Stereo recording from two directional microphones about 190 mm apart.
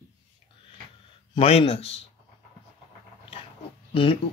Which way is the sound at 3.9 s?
30° left (ahead or behind).